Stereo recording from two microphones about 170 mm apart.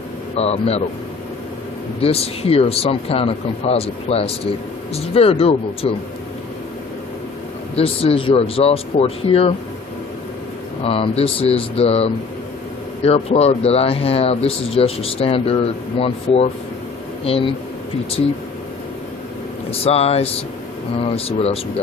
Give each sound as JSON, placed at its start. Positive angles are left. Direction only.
{"t": 0.3, "sound": "speech", "side_deg": 40}
{"t": 2.0, "sound": "speech", "side_deg": 35}
{"t": 7.8, "sound": "speech", "side_deg": 35}
{"t": 10.8, "sound": "speech", "side_deg": 35}
{"t": 19.8, "sound": "speech", "side_deg": 35}